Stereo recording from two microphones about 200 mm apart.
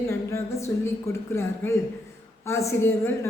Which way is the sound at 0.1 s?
15° left (ahead or behind).